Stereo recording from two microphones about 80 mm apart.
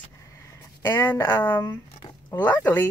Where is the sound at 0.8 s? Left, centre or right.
Left.